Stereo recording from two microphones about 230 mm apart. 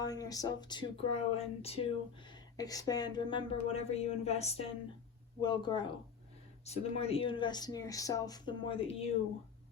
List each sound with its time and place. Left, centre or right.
0.0 s speech: centre
2.6 s speech: centre